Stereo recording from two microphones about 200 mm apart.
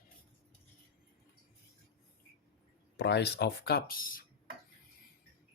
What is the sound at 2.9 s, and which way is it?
Speech, 60° left (ahead or behind).